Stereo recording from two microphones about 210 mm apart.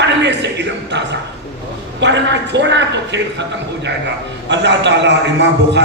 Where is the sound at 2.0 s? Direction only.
55° right (ahead or behind).